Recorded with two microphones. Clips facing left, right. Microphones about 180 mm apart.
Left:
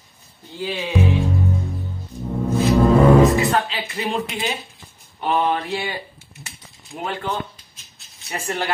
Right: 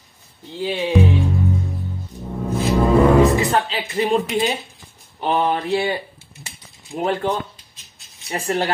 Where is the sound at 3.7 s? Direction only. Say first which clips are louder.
Right 6 dB; 35° right (ahead or behind).